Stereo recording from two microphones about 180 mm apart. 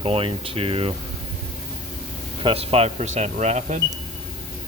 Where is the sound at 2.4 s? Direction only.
30° right (ahead or behind).